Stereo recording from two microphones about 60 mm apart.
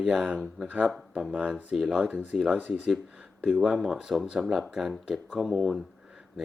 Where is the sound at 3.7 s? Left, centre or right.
Centre.